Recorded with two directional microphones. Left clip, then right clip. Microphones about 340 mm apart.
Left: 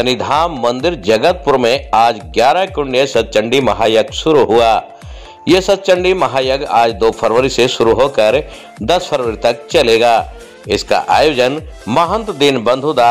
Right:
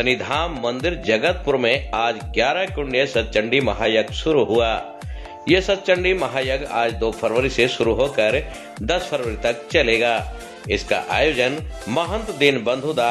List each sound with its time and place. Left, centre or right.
0.0 s a man's voice: centre